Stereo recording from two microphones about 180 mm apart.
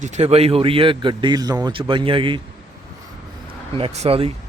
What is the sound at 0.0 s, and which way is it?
A man's voice, 35° right (ahead or behind).